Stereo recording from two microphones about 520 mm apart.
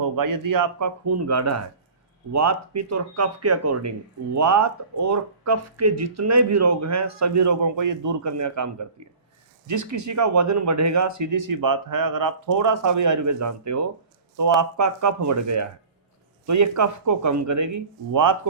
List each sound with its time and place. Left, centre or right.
0.2 s speech: right